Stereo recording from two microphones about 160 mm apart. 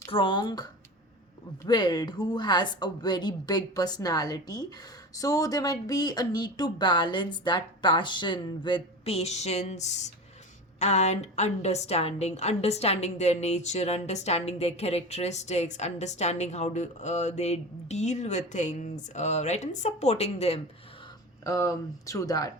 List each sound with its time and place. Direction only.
0.1 s a woman's voice: 30° left (ahead or behind)
21.4 s speech: 20° left (ahead or behind)